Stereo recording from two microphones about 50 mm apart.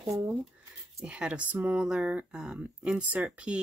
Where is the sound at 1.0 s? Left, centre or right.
Right.